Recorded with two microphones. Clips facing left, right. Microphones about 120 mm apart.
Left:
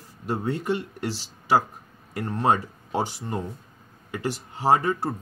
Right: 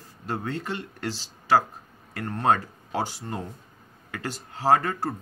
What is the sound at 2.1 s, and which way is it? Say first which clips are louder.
Speech: left 1 dB; 15° left (ahead or behind).